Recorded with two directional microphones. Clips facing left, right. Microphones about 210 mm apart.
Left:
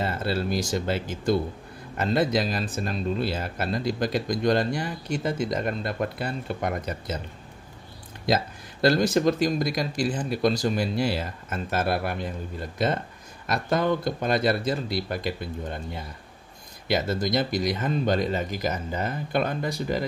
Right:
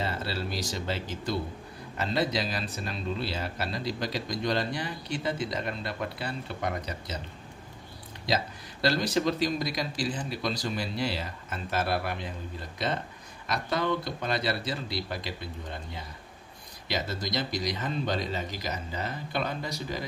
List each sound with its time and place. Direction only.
0.0 s speech: 50° left (ahead or behind)
8.8 s speech: 50° left (ahead or behind)